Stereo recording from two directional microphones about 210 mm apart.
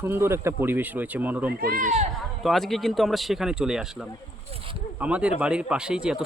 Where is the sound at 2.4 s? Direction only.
Centre (ahead or behind).